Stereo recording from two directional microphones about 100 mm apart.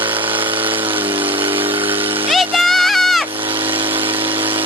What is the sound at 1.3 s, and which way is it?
Vehicle, 60° right (ahead or behind).